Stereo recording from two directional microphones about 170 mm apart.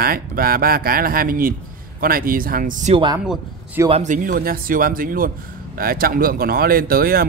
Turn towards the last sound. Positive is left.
turn(degrees=-60)  # may be behind; listen again after turning